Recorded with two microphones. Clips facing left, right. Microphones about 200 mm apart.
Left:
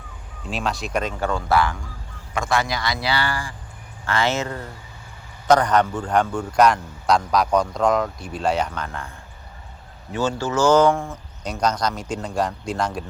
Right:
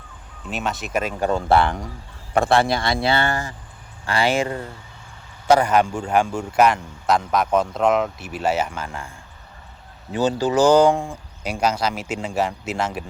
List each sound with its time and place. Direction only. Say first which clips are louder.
0.5 s speech: even; centre (ahead or behind)
1.2 s speech: right 4 dB; 20° right (ahead or behind)
4.0 s speech: right 2 dB; 10° right (ahead or behind)
10.1 s speech: right 3 dB; 15° right (ahead or behind)